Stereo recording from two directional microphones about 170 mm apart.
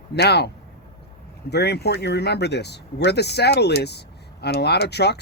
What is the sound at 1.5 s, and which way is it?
Speech, 80° left.